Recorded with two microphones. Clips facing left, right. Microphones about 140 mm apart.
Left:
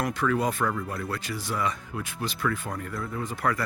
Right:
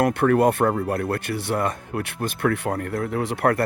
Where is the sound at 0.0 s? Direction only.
60° right (ahead or behind).